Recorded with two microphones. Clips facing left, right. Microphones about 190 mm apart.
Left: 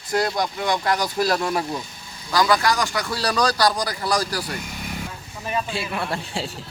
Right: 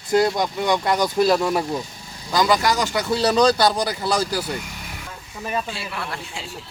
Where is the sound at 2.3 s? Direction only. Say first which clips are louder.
Right 1 dB; 20° right (ahead or behind).